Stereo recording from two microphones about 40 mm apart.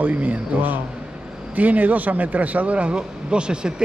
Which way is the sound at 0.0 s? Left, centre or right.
Right.